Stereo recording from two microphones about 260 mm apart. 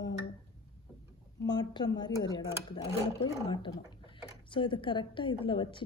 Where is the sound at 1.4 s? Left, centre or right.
Centre.